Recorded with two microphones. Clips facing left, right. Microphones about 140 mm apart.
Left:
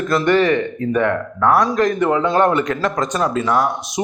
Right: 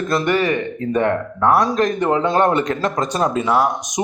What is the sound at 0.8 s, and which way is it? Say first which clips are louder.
Speech: even; 30° right (ahead or behind).